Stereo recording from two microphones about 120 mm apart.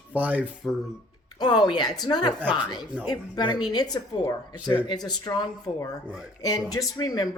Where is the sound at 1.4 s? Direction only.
40° left (ahead or behind).